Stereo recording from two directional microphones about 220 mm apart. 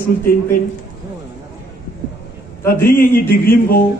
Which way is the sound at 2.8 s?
40° left (ahead or behind).